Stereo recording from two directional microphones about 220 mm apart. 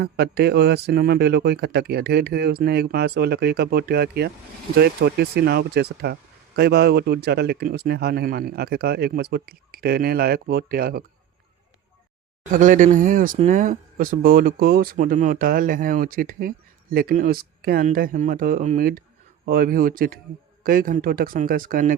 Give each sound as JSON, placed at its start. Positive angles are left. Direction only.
{"t": 0.0, "sound": "speech", "side_deg": -45}
{"t": 12.5, "sound": "speech", "side_deg": -35}